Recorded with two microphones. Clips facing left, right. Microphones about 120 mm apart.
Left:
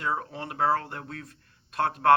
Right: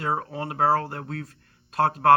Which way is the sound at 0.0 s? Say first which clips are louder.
Right 3 dB; 40° right (ahead or behind).